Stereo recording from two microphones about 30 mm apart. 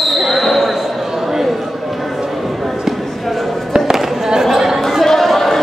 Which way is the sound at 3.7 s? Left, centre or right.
Right.